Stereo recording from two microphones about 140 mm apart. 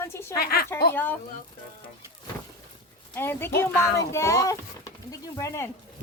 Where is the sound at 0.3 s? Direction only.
90° left.